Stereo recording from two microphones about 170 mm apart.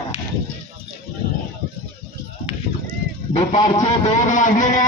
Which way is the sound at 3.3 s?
40° left (ahead or behind).